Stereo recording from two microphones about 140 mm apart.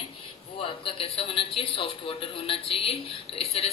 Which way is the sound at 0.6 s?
40° left (ahead or behind).